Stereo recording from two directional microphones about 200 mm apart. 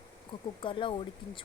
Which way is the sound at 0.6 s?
25° left (ahead or behind).